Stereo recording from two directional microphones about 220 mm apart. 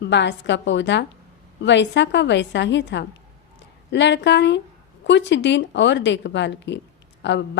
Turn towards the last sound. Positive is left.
turn(degrees=55)  # may be behind; listen again after turning